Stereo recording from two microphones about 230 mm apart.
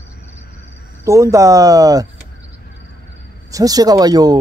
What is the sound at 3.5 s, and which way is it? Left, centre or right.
Speech, centre.